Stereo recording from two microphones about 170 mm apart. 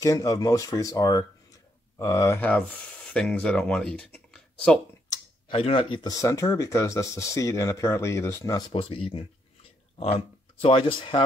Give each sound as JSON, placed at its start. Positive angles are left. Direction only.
{"t": 0.0, "sound": "speech", "side_deg": 20}
{"t": 5.5, "sound": "speech", "side_deg": 30}
{"t": 6.1, "sound": "speech", "side_deg": 20}
{"t": 8.7, "sound": "speech", "side_deg": 30}